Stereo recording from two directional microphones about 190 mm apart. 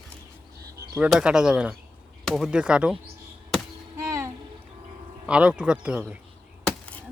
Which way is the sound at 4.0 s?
15° right (ahead or behind).